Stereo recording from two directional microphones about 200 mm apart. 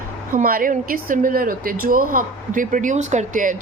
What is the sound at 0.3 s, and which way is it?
A woman's voice, 45° right (ahead or behind).